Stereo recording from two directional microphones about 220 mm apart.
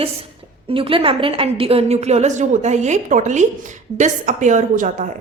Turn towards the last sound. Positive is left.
turn(degrees=-35)  # may be behind; listen again after turning